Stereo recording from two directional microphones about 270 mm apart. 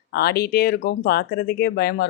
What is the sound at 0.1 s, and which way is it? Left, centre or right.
Speech, left.